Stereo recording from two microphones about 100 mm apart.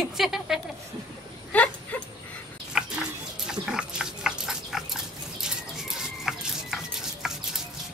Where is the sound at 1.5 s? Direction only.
15° left (ahead or behind).